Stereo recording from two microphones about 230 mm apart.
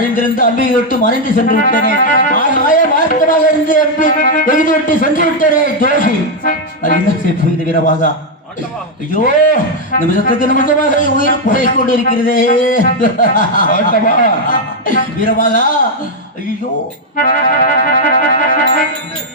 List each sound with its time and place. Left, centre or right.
0.3 s speech: left
9.1 s speech: left
17.2 s speech: left